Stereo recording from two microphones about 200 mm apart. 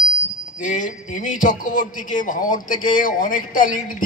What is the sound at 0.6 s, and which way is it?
Speech, 40° left (ahead or behind).